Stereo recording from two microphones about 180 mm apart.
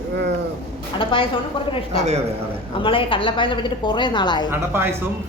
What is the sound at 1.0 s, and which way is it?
Speech, 30° left (ahead or behind).